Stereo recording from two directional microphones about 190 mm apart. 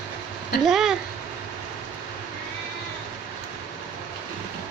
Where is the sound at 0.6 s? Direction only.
Centre (ahead or behind).